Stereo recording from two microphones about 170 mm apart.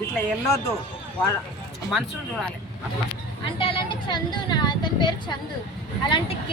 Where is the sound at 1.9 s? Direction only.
Centre (ahead or behind).